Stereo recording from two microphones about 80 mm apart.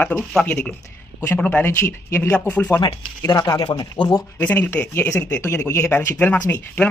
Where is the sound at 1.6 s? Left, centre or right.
Left.